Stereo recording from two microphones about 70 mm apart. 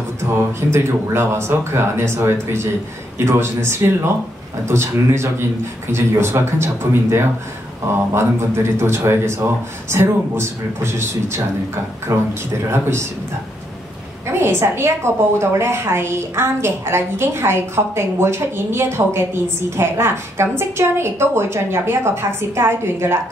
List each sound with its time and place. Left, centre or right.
0.2 s a woman's voice: right
14.2 s a woman's voice: right